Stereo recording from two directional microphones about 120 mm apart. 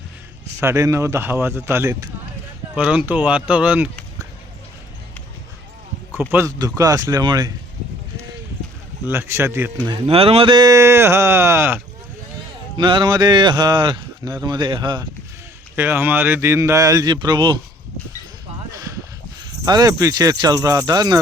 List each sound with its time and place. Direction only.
0.6 s speech: 25° right (ahead or behind)
2.7 s speech: 10° right (ahead or behind)
6.1 s speech: 20° right (ahead or behind)
6.7 s speech: 30° right (ahead or behind)
9.0 s speech: 20° right (ahead or behind)
10.1 s speech: 55° right (ahead or behind)
10.5 s speech: 30° right (ahead or behind)
12.7 s speech: 45° right (ahead or behind)
15.7 s speech: 20° right (ahead or behind); by 17.6 s 40° right (ahead or behind)
18.7 s a sound: 25° right (ahead or behind)
19.5 s speech: 35° right (ahead or behind)